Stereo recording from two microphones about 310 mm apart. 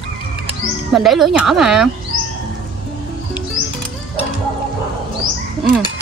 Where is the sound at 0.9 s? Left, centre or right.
Centre.